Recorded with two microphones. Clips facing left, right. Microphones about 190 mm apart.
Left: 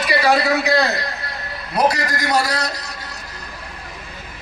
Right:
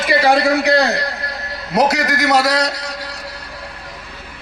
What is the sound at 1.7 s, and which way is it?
A man's voice, 90° right.